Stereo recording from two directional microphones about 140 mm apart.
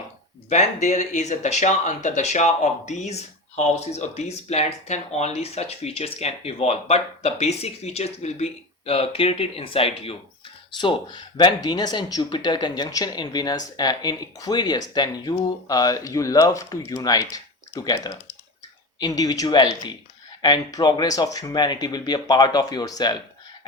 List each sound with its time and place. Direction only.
0.5 s speech: 55° left (ahead or behind); by 23.1 s 30° left (ahead or behind)